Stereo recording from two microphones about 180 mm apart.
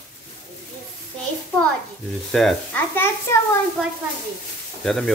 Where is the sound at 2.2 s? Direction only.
5° left (ahead or behind).